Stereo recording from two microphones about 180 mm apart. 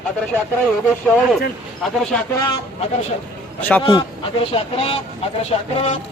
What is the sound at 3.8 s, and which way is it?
Speech, 25° left (ahead or behind).